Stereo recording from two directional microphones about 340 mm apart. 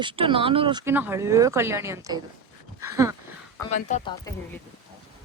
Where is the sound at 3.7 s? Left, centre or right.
Centre.